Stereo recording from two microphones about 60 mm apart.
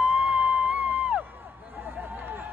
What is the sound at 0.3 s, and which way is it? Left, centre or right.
Music, right.